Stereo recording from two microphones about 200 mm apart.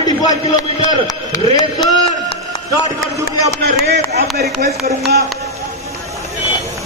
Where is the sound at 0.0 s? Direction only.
20° left (ahead or behind).